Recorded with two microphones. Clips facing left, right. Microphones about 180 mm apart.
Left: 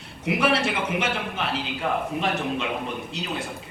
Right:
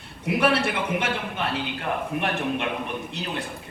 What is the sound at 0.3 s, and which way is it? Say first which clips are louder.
Speech: right 1 dB; 60° right (ahead or behind).